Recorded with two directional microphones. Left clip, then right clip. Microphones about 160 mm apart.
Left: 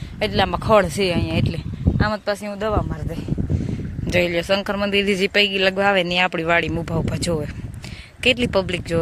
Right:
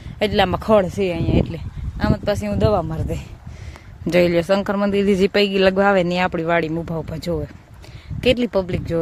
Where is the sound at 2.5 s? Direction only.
50° right (ahead or behind).